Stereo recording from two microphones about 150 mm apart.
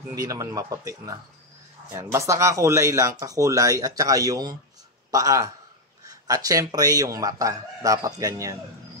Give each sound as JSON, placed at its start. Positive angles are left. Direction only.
{"t": 0.1, "sound": "speech", "side_deg": -25}